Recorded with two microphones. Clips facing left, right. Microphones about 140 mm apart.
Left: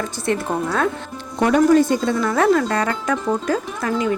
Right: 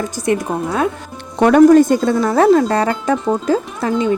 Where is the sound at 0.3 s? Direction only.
15° right (ahead or behind).